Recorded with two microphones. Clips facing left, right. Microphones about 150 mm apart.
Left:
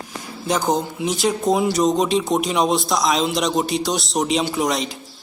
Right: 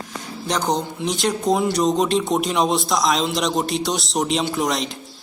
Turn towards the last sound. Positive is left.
turn(degrees=0)  # may be behind; listen again after turning